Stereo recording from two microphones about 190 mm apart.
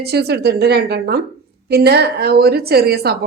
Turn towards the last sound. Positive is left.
turn(degrees=-55)  # may be behind; listen again after turning